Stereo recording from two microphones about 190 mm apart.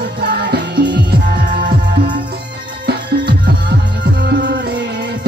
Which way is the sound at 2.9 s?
60° right (ahead or behind).